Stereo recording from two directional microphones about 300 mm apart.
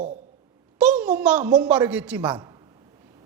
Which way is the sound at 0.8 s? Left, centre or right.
Centre.